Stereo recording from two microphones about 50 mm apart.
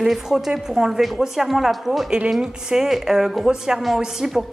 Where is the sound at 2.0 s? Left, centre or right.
Centre.